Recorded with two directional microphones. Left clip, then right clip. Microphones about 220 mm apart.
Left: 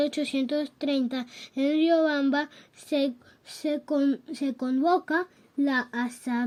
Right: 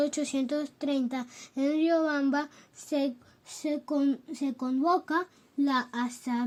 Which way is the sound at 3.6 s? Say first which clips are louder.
Left 3 dB; centre (ahead or behind).